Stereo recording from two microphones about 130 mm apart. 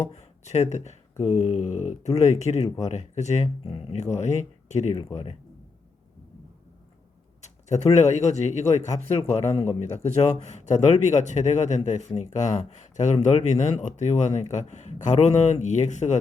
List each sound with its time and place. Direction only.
0.1 s a man's voice: 60° left (ahead or behind)
3.6 s a man's voice: 45° left (ahead or behind)
5.1 s speech: 50° left (ahead or behind)
7.4 s a man's voice: 60° left (ahead or behind)